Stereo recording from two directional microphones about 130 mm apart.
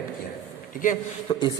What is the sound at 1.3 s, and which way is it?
Speech, 40° left (ahead or behind).